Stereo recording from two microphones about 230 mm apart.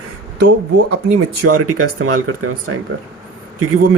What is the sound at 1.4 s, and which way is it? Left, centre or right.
Speech, right.